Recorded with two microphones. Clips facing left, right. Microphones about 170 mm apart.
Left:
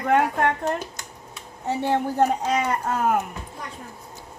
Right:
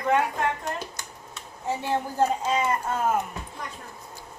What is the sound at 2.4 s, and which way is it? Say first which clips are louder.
Speech: left 2 dB; 75° left (ahead or behind).